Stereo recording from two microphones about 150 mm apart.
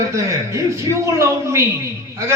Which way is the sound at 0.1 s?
20° right (ahead or behind).